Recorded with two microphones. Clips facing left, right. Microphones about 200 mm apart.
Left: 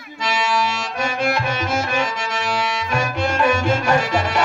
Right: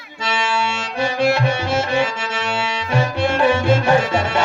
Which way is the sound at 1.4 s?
30° right (ahead or behind).